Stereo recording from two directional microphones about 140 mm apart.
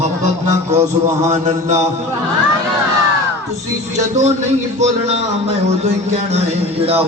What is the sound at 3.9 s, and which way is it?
Speech, 55° right (ahead or behind).